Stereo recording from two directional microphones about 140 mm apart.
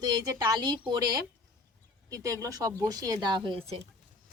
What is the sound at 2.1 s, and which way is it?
A woman's voice, 25° right (ahead or behind).